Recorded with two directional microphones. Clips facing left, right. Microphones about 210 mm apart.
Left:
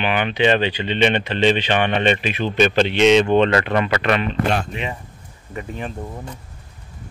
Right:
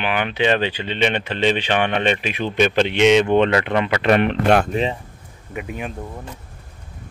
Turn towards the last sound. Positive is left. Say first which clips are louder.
# left 1 dB
turn(degrees=-5)  # may be behind; listen again after turning